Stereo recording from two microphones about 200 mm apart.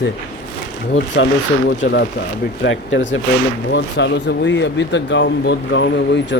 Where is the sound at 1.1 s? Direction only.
60° left (ahead or behind).